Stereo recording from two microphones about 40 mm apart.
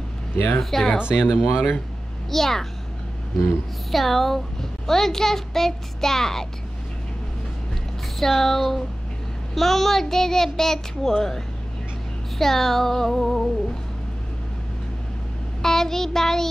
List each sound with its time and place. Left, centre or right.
0.6 s speech: centre
0.9 s speech: right
2.3 s a child's voice: centre
3.9 s a child's voice: centre
8.2 s a child's voice: centre
15.6 s a child's voice: centre